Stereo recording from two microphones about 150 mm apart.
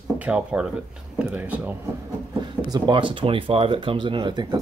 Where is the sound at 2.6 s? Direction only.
30° right (ahead or behind).